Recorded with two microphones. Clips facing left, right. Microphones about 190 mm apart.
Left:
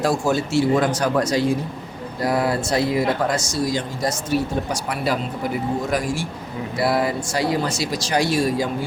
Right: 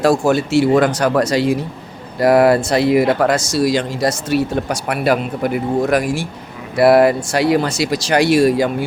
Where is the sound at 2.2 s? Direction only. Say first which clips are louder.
Right 9 dB; 75° right (ahead or behind).